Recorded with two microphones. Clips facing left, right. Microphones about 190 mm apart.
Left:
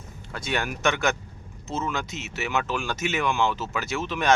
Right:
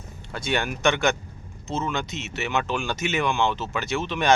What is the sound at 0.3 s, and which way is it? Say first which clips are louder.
Speech: right 2 dB; centre (ahead or behind).